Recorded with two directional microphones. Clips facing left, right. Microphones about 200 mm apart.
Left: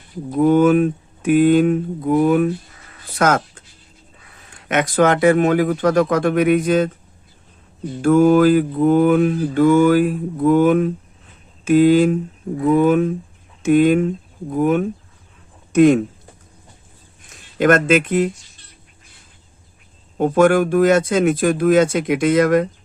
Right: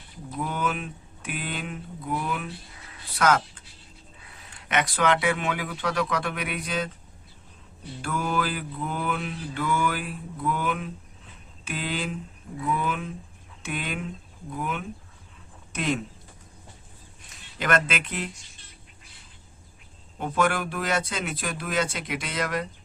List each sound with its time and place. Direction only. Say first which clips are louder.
0.3 s mantra: left 17 dB; 45° left (ahead or behind)
3.2 s speech: left 6 dB; 45° left (ahead or behind)
4.7 s mantra: left 8 dB; 45° left (ahead or behind)
8.0 s mantra: left 17 dB; 50° left (ahead or behind)
17.6 s mantra: left 12 dB; 45° left (ahead or behind)
20.1 s mantra: left 12 dB; 50° left (ahead or behind)